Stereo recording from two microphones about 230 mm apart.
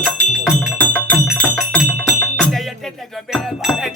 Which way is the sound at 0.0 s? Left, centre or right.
Centre.